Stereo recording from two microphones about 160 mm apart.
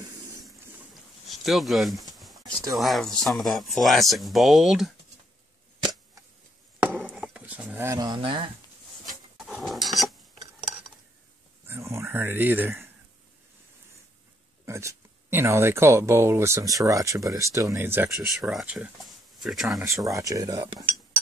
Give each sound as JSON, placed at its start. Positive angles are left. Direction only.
{"t": 1.2, "sound": "speech", "side_deg": 0}
{"t": 2.1, "sound": "a sound", "side_deg": 0}
{"t": 2.7, "sound": "speech", "side_deg": 0}
{"t": 6.8, "sound": "a sound", "side_deg": -10}
{"t": 9.5, "sound": "filing", "side_deg": 0}
{"t": 11.6, "sound": "a sound", "side_deg": -15}
{"t": 14.7, "sound": "speech", "side_deg": -20}
{"t": 18.1, "sound": "speech", "side_deg": 0}
{"t": 19.8, "sound": "speech", "side_deg": -20}